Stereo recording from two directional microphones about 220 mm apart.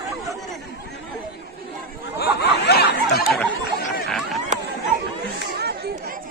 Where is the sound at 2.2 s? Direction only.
50° left (ahead or behind).